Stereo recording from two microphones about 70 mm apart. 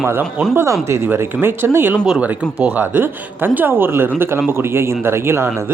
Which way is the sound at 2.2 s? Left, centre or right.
Centre.